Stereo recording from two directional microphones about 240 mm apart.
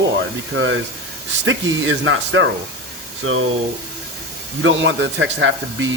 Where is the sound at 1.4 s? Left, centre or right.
Right.